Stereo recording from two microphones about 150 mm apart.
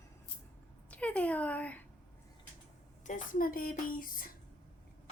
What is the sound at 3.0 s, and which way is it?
Speech, 60° left (ahead or behind).